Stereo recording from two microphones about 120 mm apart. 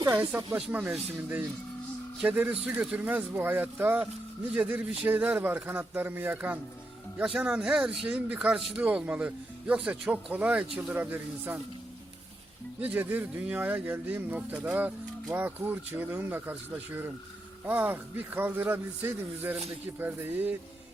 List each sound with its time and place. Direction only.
0.1 s speech: 15° right (ahead or behind)
2.2 s speech: 15° right (ahead or behind)
12.8 s speech: 15° right (ahead or behind)